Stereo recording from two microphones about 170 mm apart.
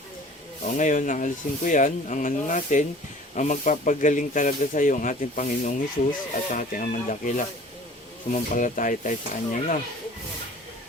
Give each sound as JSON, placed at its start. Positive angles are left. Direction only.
{"t": 0.8, "sound": "speech", "side_deg": 50}